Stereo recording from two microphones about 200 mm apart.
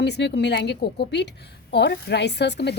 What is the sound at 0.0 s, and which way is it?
A woman's voice, 60° left (ahead or behind).